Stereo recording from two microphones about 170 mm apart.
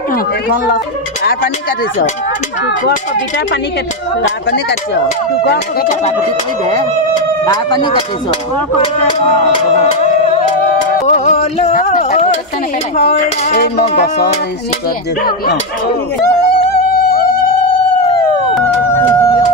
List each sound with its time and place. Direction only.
0.1 s speech: 60° left (ahead or behind)
7.4 s speech: 25° left (ahead or behind)
11.1 s music: 45° left (ahead or behind)
11.9 s a sound: 55° left (ahead or behind)
16.7 s music: 60° left (ahead or behind)
18.5 s a sound: 10° left (ahead or behind)